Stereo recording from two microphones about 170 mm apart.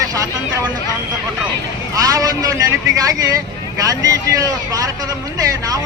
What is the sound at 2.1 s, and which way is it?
Speech, 20° right (ahead or behind).